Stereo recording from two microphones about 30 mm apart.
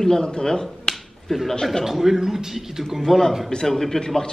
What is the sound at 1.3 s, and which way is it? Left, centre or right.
A man's voice, centre.